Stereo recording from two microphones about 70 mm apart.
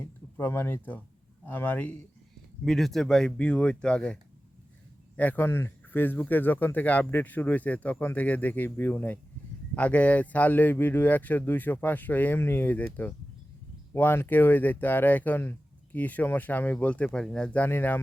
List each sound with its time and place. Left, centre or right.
0.3 s speech: left
2.6 s speech: centre
5.1 s speech: left
5.5 s speech: left
13.9 s speech: left; by 17.6 s centre
17.6 s speech: left